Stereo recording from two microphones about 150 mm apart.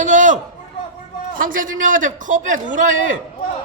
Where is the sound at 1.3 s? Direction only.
65° right (ahead or behind).